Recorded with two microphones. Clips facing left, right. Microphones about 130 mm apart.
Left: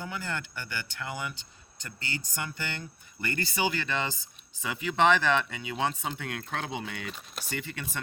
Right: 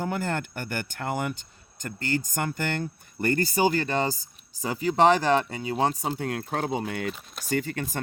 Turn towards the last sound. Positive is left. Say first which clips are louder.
# right 9 dB
turn(degrees=-40)  # may be behind; listen again after turning